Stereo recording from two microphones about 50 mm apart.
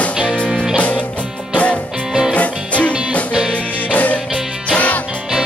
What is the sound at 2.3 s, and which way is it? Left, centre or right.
Music, left.